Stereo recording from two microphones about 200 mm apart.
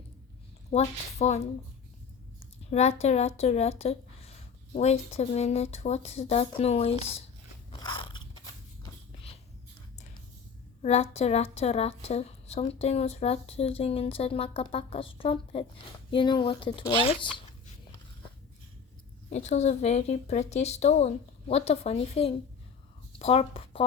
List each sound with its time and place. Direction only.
0.7 s a woman's voice: 35° left (ahead or behind)
2.4 s a woman's voice: 30° left (ahead or behind)
7.7 s biting: 25° left (ahead or behind)
10.8 s a woman's voice: 30° left (ahead or behind)
19.3 s a woman's voice: 35° left (ahead or behind)